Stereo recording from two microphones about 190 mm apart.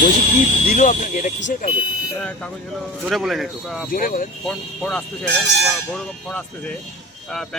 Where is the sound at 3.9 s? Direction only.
45° left (ahead or behind).